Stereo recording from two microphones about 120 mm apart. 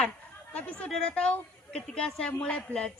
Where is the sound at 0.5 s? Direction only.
10° left (ahead or behind).